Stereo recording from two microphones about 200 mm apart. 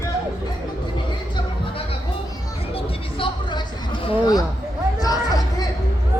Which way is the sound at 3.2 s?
25° left (ahead or behind).